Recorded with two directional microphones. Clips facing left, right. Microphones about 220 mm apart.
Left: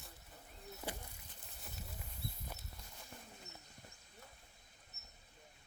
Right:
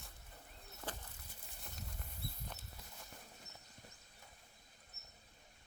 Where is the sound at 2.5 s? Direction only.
10° left (ahead or behind).